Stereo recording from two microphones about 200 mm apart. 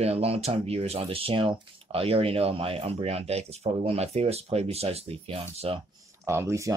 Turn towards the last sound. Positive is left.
turn(degrees=-15)  # may be behind; listen again after turning